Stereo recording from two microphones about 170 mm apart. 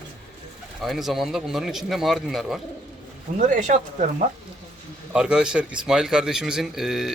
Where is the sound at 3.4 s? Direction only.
45° right (ahead or behind).